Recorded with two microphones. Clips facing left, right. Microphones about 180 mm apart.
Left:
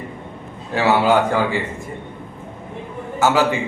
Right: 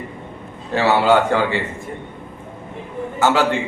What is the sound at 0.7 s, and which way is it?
Speech, 10° left (ahead or behind).